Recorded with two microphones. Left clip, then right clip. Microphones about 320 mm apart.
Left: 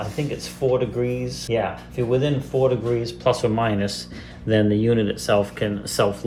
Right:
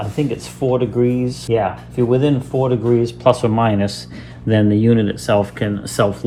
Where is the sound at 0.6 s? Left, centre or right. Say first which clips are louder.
Right 3 dB; right.